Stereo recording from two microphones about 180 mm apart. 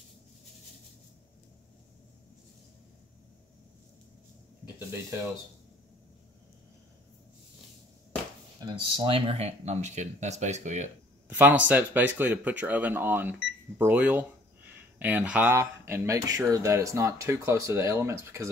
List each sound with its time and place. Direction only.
8.5 s speech: 25° right (ahead or behind); by 10.9 s 40° right (ahead or behind)
11.2 s speech: 10° right (ahead or behind)